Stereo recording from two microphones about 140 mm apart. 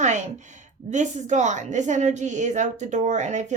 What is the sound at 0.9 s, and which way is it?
A woman's voice, 60° right (ahead or behind).